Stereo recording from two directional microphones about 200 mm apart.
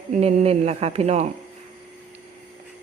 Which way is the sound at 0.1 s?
35° right (ahead or behind).